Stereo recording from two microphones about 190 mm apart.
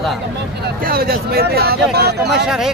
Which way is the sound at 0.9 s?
50° right (ahead or behind).